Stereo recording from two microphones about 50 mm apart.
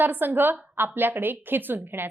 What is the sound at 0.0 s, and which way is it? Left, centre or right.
A woman's voice, right.